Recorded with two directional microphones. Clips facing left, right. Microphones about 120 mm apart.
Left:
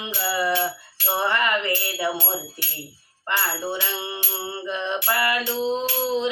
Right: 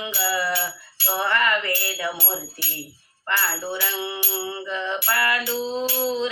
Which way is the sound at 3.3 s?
20° left (ahead or behind).